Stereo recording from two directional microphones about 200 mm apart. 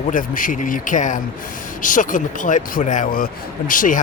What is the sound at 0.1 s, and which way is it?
Speech, 40° left (ahead or behind).